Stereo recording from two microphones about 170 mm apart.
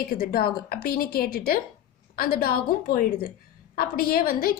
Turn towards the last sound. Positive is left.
turn(degrees=60)  # may be behind; listen again after turning